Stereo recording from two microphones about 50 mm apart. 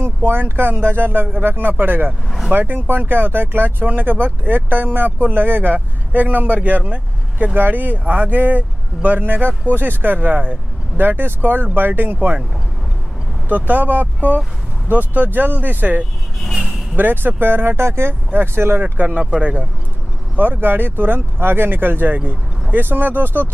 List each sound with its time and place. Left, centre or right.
0.0 s speech: right
13.5 s speech: right
16.3 s speech: centre
16.9 s speech: right
18.9 s speech: right
20.3 s speech: right